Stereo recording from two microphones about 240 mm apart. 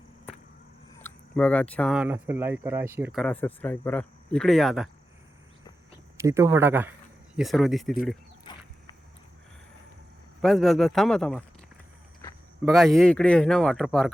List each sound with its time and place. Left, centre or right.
0.9 s speech: centre
6.1 s speech: centre
8.5 s a sound: centre
10.4 s speech: centre
12.6 s speech: centre